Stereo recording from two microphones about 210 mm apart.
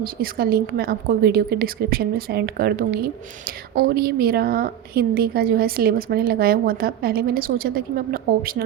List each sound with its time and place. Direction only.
0.0 s a woman's voice: 45° right (ahead or behind)